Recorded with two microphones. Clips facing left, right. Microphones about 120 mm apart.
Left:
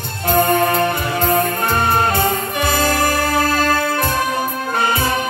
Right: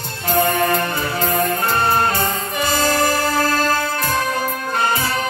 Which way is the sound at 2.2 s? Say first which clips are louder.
Left 3 dB; 50° left (ahead or behind).